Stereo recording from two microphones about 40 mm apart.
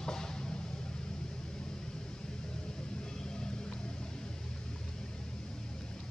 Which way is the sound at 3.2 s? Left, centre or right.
Centre.